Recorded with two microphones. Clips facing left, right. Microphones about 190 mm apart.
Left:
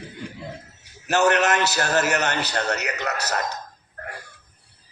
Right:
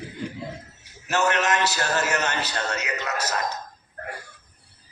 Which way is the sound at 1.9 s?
65° left (ahead or behind).